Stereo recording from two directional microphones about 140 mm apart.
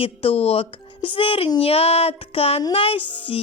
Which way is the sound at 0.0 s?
40° left (ahead or behind).